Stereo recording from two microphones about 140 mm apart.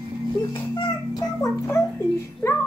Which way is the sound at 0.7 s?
25° left (ahead or behind).